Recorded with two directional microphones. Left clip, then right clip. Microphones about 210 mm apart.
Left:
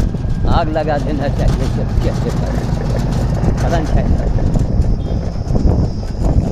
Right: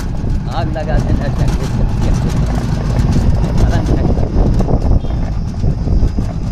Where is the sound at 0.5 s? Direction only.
45° left (ahead or behind).